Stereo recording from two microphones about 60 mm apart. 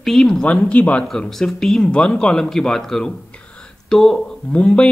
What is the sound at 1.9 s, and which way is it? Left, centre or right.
Speech, centre.